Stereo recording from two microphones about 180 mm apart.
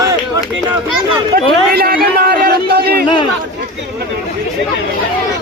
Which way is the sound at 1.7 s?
55° right (ahead or behind).